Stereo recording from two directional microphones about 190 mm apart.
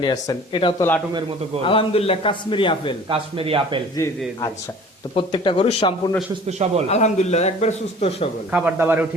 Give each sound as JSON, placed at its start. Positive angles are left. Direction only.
{"t": 0.0, "sound": "a man's voice", "side_deg": 20}
{"t": 0.8, "sound": "a man's voice", "side_deg": 10}
{"t": 1.6, "sound": "a man's voice", "side_deg": 30}
{"t": 3.1, "sound": "speech", "side_deg": -30}
{"t": 3.9, "sound": "a man's voice", "side_deg": 20}
{"t": 8.5, "sound": "a man's voice", "side_deg": -10}